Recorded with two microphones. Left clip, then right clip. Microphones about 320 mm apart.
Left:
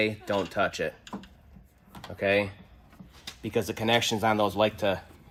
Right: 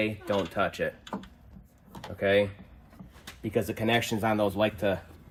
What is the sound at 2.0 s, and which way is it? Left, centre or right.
Speech, centre.